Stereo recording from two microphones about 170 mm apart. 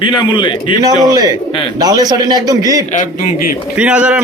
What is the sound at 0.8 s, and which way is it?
A man's voice, 20° right (ahead or behind).